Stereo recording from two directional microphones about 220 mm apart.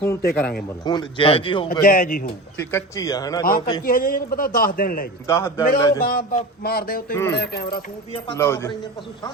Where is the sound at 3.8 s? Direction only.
40° left (ahead or behind).